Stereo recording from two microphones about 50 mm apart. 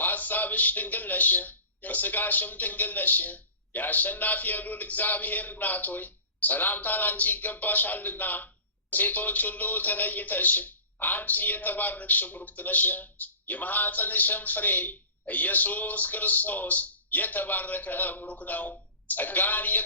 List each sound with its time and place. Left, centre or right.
0.0 s a man's voice: left